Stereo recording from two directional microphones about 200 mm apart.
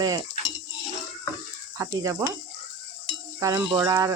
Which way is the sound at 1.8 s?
15° right (ahead or behind).